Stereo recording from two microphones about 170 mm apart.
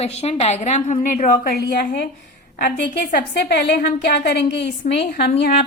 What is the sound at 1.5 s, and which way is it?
Speech, 70° left (ahead or behind).